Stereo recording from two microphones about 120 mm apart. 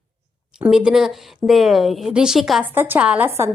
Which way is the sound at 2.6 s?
15° right (ahead or behind).